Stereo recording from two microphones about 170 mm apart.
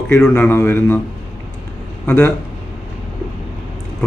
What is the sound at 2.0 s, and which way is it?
Speech, 10° left (ahead or behind).